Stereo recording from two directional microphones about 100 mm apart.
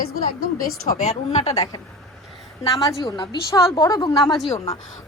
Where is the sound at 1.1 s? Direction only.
90° left.